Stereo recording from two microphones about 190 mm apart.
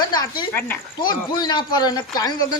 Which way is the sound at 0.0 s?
20° left (ahead or behind).